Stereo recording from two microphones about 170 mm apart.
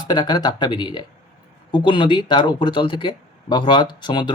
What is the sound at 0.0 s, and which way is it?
Speech, 25° left (ahead or behind).